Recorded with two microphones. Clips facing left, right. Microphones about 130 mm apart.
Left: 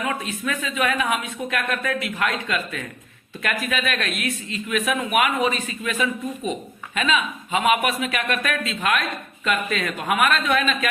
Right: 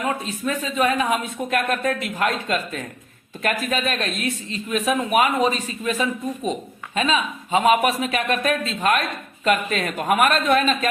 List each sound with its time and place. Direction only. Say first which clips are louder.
0.0 s a woman's voice: right 2 dB; 35° right (ahead or behind)